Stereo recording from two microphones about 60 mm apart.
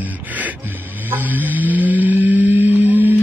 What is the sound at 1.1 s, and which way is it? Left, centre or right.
Music, right.